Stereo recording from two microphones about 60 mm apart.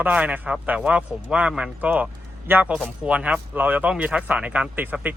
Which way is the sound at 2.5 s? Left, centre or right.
Right.